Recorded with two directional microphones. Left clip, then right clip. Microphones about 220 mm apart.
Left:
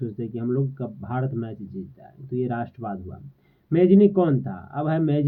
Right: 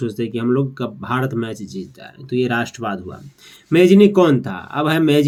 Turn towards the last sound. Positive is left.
turn(degrees=-20)  # may be behind; listen again after turning